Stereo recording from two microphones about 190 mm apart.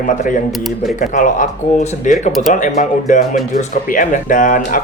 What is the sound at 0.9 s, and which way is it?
Speech, 40° left (ahead or behind).